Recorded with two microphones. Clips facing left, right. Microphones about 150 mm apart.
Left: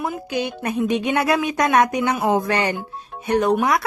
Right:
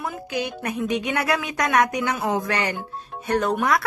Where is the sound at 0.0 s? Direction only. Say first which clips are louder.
Left 3 dB; 25° left (ahead or behind).